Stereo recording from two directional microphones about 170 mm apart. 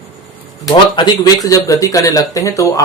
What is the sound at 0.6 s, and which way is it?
Speech, 25° left (ahead or behind).